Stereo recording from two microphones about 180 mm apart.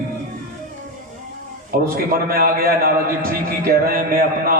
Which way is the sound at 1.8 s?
55° right (ahead or behind).